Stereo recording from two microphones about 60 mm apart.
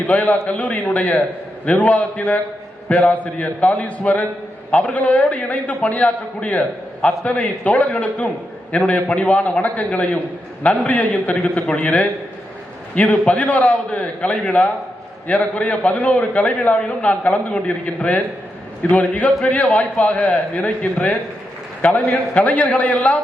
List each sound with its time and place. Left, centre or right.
0.0 s a man's voice: left
21.8 s a man's voice: left